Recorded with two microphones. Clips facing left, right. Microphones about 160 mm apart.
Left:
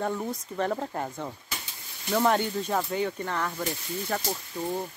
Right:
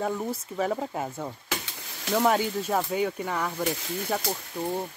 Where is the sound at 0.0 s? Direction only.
5° right (ahead or behind).